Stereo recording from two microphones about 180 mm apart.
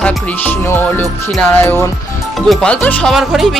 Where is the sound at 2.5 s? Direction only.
5° left (ahead or behind).